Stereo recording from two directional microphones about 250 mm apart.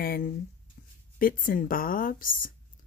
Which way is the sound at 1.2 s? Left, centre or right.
Left.